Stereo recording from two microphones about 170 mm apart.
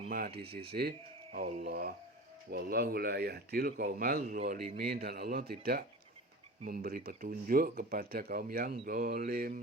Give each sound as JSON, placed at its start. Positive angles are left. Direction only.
{"t": 0.1, "sound": "speech", "side_deg": -65}
{"t": 1.6, "sound": "speech", "side_deg": -60}